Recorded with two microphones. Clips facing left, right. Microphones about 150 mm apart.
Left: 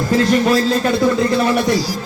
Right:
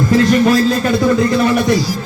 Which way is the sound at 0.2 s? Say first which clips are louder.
Right 2 dB; 30° left (ahead or behind).